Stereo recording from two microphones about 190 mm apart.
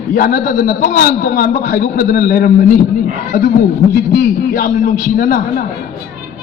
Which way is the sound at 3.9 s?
50° left (ahead or behind).